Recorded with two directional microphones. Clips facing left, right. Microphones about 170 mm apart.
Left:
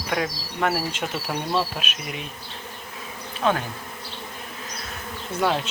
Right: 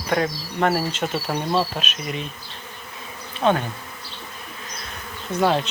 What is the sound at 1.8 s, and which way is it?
Bee, 10° left (ahead or behind).